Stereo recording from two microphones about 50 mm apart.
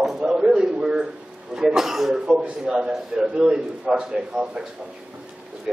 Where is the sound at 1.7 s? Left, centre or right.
Centre.